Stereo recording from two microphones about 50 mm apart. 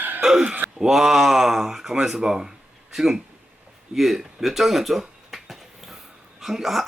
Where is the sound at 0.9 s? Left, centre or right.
Centre.